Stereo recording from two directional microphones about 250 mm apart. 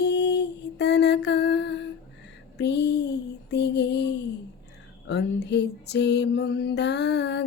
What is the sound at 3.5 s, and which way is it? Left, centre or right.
Lullaby, left.